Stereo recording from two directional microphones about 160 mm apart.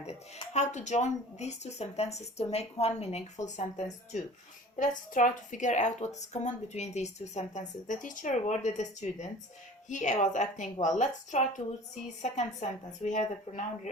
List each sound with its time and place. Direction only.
0.0 s a woman's voice: 40° left (ahead or behind)